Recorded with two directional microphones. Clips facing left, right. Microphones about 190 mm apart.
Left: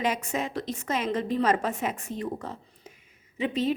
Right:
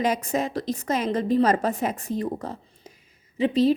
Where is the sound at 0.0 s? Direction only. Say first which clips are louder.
Right 4 dB; 40° right (ahead or behind).